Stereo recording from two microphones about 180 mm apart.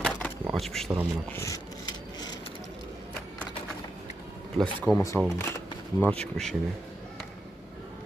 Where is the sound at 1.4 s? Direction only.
20° left (ahead or behind).